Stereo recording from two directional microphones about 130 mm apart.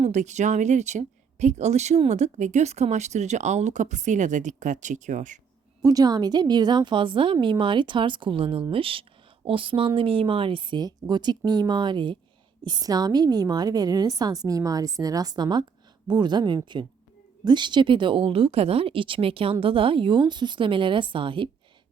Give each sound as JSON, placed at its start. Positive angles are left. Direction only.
{"t": 0.0, "sound": "speech", "side_deg": -65}
{"t": 5.8, "sound": "a woman's voice", "side_deg": -30}